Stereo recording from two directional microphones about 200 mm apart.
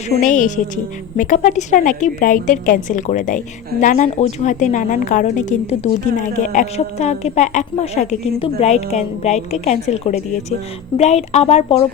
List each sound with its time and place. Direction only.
0.2 s a woman's voice: 40° left (ahead or behind)